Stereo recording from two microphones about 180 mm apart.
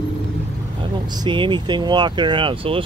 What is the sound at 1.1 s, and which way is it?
Speech, 25° right (ahead or behind).